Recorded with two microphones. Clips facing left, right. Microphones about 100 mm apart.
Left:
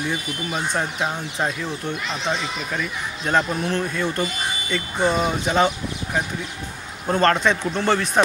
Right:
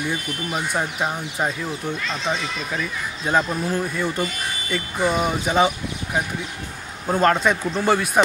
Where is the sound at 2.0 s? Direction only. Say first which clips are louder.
Even; 20° left (ahead or behind).